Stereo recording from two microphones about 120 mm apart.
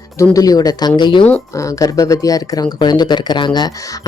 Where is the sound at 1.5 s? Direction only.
25° left (ahead or behind).